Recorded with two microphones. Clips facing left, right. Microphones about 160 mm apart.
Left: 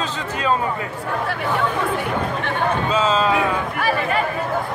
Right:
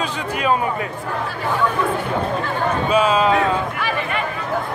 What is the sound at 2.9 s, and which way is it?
Speech, 15° right (ahead or behind).